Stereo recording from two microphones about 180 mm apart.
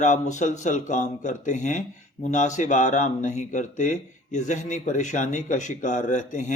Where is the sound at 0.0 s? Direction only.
40° left (ahead or behind).